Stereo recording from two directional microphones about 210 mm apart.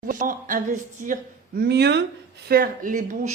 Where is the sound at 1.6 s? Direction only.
50° right (ahead or behind).